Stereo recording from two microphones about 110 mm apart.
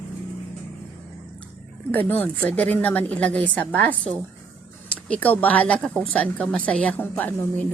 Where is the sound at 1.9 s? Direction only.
15° left (ahead or behind).